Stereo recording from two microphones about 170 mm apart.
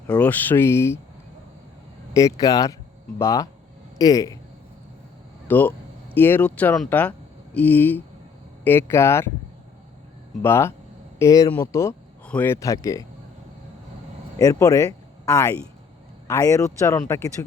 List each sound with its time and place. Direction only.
0.1 s speech: 10° left (ahead or behind)
2.1 s speech: 20° left (ahead or behind)
5.5 s speech: 10° left (ahead or behind)
10.4 s speech: 15° left (ahead or behind)
14.3 s speech: 20° left (ahead or behind)